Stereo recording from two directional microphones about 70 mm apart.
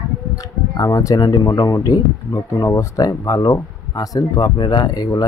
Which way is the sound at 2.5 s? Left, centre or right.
Left.